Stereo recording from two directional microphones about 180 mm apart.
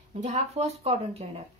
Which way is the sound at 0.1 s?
40° right (ahead or behind).